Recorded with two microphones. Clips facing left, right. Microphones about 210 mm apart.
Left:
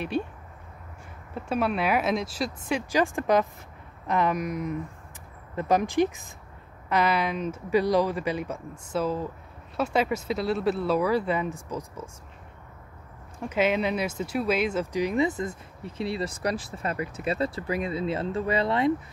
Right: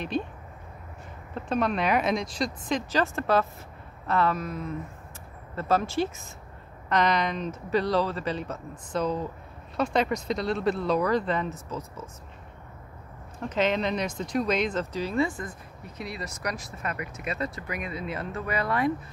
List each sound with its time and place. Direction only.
0.1 s speech: 10° left (ahead or behind)
1.3 s speech: 5° left (ahead or behind)
13.4 s speech: 10° left (ahead or behind)